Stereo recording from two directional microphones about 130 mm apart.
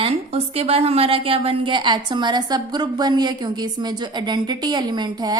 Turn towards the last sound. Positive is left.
turn(degrees=-30)  # may be behind; listen again after turning